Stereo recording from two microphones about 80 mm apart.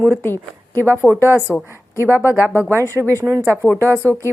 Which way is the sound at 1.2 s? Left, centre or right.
Right.